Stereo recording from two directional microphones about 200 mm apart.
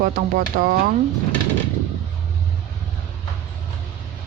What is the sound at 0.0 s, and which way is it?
Speech, 45° right (ahead or behind).